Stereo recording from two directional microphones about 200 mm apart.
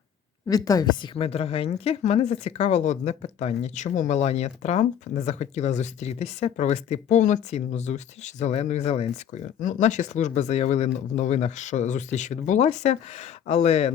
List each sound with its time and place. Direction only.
0.4 s a woman's voice: 20° left (ahead or behind)